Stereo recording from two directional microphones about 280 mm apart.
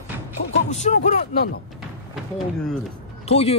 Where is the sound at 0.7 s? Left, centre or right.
Left.